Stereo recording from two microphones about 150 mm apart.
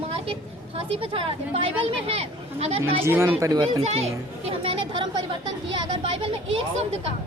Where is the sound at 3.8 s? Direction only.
45° right (ahead or behind).